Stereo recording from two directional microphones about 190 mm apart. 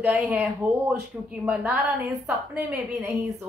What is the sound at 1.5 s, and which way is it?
A woman's voice, 5° right (ahead or behind).